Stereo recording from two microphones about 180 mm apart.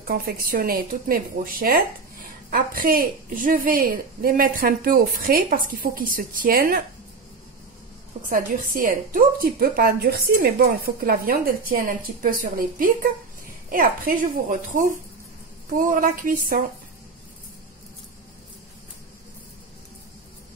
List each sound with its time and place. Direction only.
0.0 s a woman's voice: 55° right (ahead or behind)
8.3 s a woman's voice: 50° right (ahead or behind)